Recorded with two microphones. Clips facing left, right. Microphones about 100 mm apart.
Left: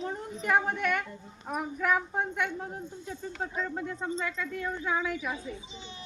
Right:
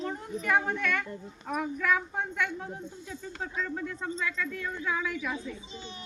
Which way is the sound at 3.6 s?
20° left (ahead or behind).